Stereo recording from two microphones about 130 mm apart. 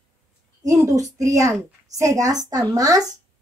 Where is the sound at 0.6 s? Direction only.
25° right (ahead or behind).